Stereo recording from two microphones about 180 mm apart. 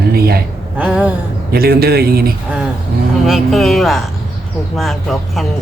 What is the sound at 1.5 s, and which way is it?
Speech, 60° right (ahead or behind).